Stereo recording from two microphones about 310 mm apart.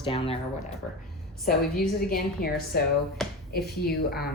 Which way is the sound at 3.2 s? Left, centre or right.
Centre.